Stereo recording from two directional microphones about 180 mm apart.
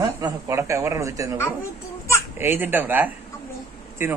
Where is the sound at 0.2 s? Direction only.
15° right (ahead or behind).